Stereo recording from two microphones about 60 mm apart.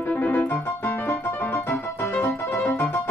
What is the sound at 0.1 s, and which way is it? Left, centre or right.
Keyboard, left.